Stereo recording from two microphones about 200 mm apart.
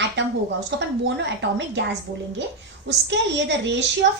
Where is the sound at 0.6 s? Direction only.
60° right (ahead or behind).